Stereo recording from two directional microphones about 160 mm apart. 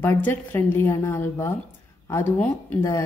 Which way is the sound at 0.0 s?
15° left (ahead or behind).